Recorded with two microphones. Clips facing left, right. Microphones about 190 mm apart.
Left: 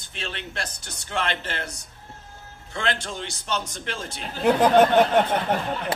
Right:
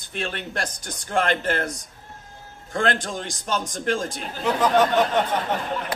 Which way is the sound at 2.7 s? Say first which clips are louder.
Right 5 dB; 50° right (ahead or behind).